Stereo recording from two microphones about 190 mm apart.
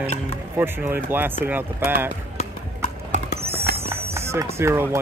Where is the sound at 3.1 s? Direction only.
40° right (ahead or behind).